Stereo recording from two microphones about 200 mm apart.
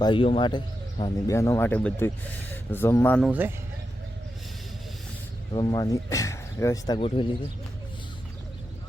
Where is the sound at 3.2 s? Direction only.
10° right (ahead or behind).